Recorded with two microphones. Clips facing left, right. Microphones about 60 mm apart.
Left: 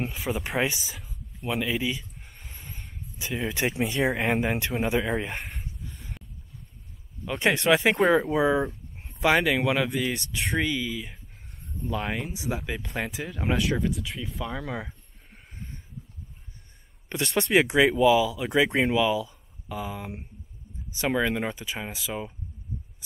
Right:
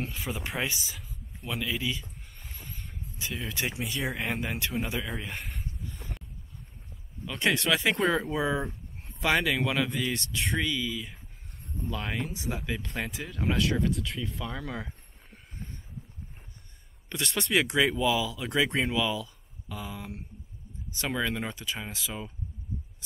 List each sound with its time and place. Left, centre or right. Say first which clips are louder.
0.3 s speech: left 8 dB; centre
0.7 s speech: left 1 dB; centre
1.4 s speech: left 5 dB; centre
3.5 s speech: left 7 dB; left
5.4 s a sound: left 1 dB; centre
7.2 s speech: left 3 dB; left
7.9 s speech: left 5 dB; centre
9.2 s speech: left 4 dB; centre
13.7 s speech: left 1 dB; centre
17.4 s speech: left 5 dB; left; by 22.2 s centre